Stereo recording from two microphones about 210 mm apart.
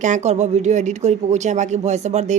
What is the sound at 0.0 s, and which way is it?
Speech, 35° right (ahead or behind).